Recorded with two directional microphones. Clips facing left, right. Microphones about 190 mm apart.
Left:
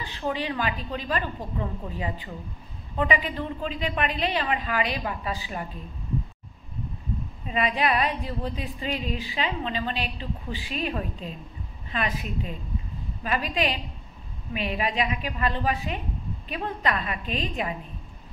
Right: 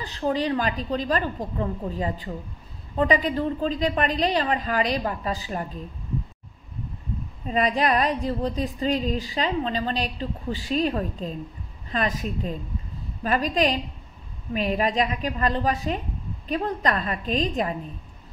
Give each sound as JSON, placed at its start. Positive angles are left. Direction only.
{"t": 0.0, "sound": "speech", "side_deg": -40}
{"t": 7.4, "sound": "speech", "side_deg": -40}